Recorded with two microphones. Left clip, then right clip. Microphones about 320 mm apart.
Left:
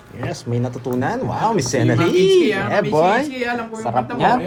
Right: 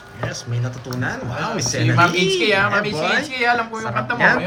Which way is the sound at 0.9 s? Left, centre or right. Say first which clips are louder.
Left 3 dB; left.